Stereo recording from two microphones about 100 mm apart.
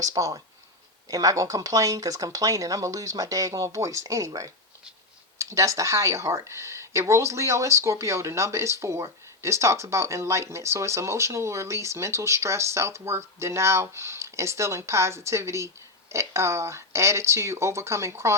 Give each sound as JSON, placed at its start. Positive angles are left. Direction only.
{"t": 0.0, "sound": "speech", "side_deg": -35}